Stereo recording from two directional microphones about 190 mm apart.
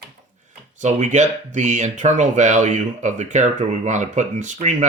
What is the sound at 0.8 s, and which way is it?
Speech, 40° right (ahead or behind).